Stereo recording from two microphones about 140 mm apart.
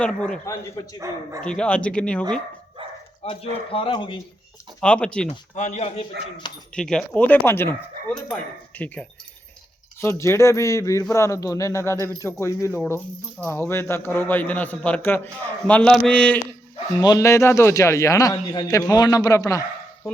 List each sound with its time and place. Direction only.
0.0 s a man's voice: 5° left (ahead or behind)
0.9 s speech: 20° right (ahead or behind)
1.4 s a man's voice: 5° left (ahead or behind)
3.2 s speech: 45° left (ahead or behind)
4.8 s a man's voice: 5° left (ahead or behind)
5.5 s speech: 55° left (ahead or behind)
6.7 s a man's voice: 5° left (ahead or behind)
16.9 s a man's voice: 25° left (ahead or behind)